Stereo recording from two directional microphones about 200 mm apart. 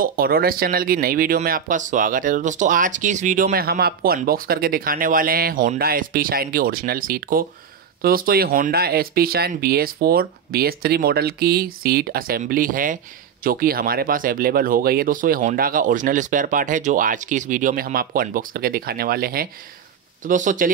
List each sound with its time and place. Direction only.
0.0 s speech: 50° right (ahead or behind)